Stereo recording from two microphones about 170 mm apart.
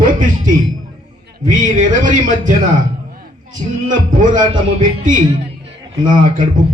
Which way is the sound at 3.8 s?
50° right (ahead or behind).